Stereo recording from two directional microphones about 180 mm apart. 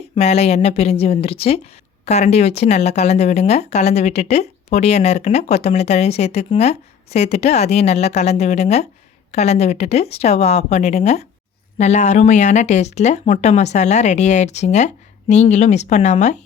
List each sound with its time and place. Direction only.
0.2 s speech: 35° left (ahead or behind)